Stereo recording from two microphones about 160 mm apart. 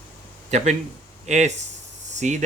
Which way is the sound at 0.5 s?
45° right (ahead or behind).